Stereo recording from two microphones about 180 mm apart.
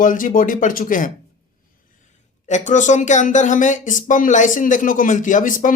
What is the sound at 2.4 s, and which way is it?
Speech, 40° left (ahead or behind).